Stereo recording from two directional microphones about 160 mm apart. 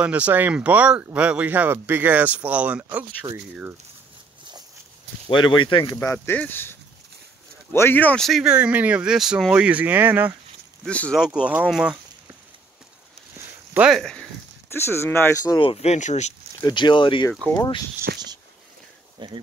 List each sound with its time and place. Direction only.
0.0 s speech: 10° right (ahead or behind)
5.3 s speech: 30° left (ahead or behind)
6.2 s speech: 10° left (ahead or behind); by 10.3 s 10° right (ahead or behind)
10.9 s speech: 5° left (ahead or behind)
11.1 s speech: 5° right (ahead or behind)
13.7 s speech: centre (ahead or behind)
14.7 s speech: 15° left (ahead or behind)
15.5 s speech: 35° left (ahead or behind)
16.6 s speech: 30° left (ahead or behind)
17.3 s speech: 10° left (ahead or behind)
17.6 s speech: 25° left (ahead or behind)
18.1 s a sound: 90° right
19.1 s speech: 30° right (ahead or behind)